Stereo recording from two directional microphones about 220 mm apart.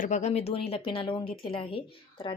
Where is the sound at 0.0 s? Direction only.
30° left (ahead or behind).